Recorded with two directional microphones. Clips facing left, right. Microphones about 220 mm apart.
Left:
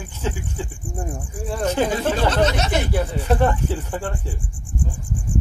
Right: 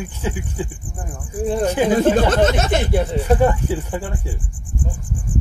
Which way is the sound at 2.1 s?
50° right (ahead or behind).